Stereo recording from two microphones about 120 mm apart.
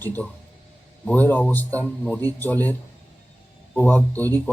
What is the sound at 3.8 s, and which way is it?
Speech, 15° left (ahead or behind).